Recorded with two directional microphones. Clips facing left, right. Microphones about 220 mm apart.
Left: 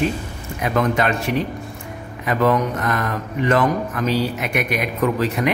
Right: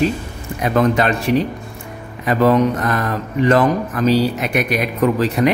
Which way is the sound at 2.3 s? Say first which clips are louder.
Right 4 dB; 35° right (ahead or behind).